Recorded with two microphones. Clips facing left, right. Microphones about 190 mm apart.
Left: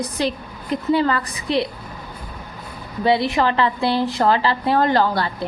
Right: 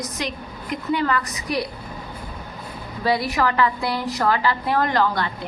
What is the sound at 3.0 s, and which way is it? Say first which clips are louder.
A woman's voice: left 3 dB; 25° left (ahead or behind).